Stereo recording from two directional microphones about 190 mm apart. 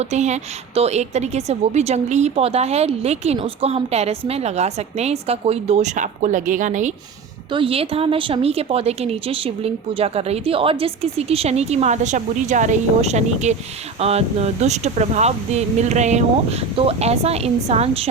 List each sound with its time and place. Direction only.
0.0 s a woman's voice: 35° right (ahead or behind)
7.5 s a woman's voice: 30° right (ahead or behind)